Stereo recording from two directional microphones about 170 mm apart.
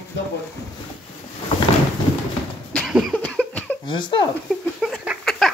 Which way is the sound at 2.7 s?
Centre (ahead or behind).